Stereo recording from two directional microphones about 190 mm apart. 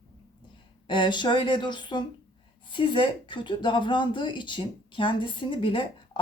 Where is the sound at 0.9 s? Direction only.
25° left (ahead or behind).